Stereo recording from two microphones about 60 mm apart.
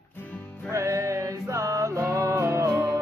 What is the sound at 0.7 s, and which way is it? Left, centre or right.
Music, right.